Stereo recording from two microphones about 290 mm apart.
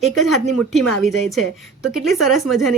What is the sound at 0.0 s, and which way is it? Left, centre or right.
Speech, centre.